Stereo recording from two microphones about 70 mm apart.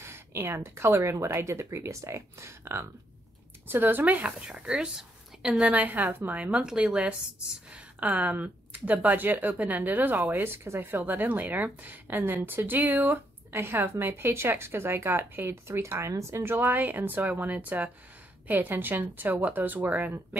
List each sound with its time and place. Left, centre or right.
0.0 s speech: right
4.5 s speech: centre
5.7 s speech: right